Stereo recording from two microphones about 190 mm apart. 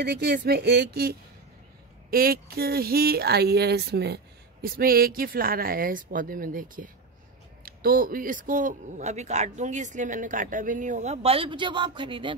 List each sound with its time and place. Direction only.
0.0 s a man's voice: 60° right (ahead or behind); by 12.4 s 25° right (ahead or behind)